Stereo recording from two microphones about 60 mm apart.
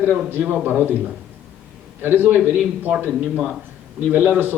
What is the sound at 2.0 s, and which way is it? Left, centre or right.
Speech, right.